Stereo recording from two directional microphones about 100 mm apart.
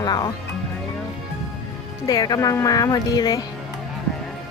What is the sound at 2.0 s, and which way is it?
A woman's voice, 35° left (ahead or behind).